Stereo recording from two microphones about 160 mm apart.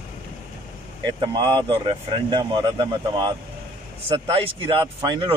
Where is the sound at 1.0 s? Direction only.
25° right (ahead or behind).